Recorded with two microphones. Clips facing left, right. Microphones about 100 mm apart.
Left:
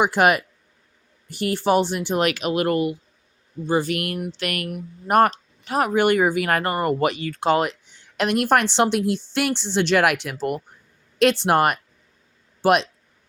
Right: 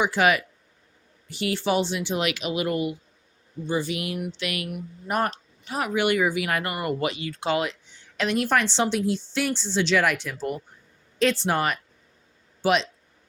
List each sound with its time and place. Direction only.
0.0 s speech: 50° left (ahead or behind)
7.0 s speech: 55° left (ahead or behind)
8.1 s a woman's voice: 60° left (ahead or behind)